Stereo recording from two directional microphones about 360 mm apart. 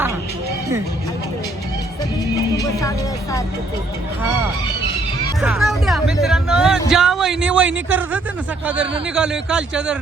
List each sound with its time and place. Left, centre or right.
2.3 s music: centre
5.4 s speech: centre